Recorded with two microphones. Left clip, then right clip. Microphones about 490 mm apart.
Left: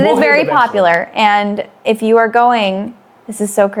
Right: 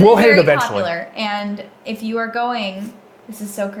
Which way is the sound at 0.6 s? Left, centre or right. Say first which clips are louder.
Left 9 dB; left.